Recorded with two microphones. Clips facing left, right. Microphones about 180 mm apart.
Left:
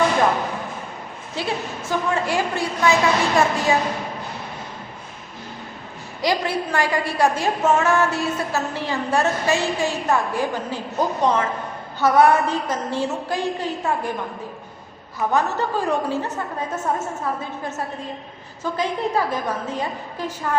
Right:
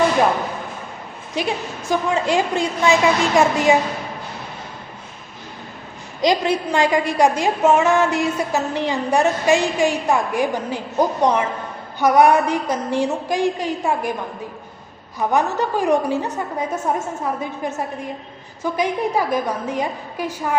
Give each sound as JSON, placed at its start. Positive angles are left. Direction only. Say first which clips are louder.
{"t": 1.4, "sound": "a woman's voice", "louder": "right 3 dB", "side_deg": -15}
{"t": 6.2, "sound": "a woman's voice", "louder": "right 4 dB", "side_deg": -20}
{"t": 15.2, "sound": "a woman's voice", "louder": "right 2 dB", "side_deg": -15}